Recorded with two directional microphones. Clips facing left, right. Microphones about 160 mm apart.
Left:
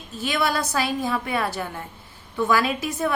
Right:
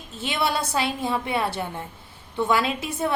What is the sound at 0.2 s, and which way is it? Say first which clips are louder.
A woman's voice: left 1 dB; 25° right (ahead or behind).